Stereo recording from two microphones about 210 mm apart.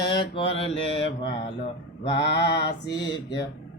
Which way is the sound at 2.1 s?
55° left (ahead or behind).